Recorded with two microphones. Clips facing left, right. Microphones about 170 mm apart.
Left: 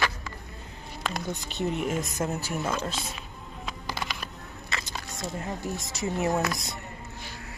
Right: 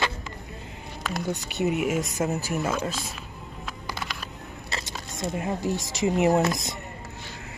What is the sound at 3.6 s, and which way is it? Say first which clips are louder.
Music: left 1 dB; centre (ahead or behind).